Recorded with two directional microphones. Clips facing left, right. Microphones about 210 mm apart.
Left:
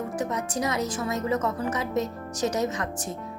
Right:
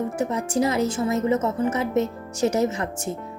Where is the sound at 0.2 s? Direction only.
25° right (ahead or behind).